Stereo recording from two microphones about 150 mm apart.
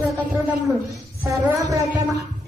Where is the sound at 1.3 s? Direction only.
20° right (ahead or behind).